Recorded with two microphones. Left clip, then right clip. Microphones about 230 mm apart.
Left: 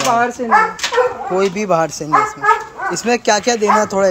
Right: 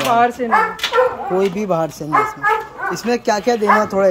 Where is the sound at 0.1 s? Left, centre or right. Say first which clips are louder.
Right 1 dB; left.